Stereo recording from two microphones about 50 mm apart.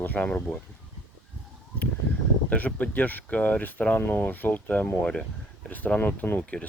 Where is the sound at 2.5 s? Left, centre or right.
Left.